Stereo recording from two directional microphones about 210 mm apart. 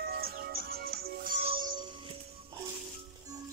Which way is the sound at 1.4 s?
25° right (ahead or behind).